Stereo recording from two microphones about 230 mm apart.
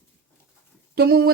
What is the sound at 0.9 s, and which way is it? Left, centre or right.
Speech, right.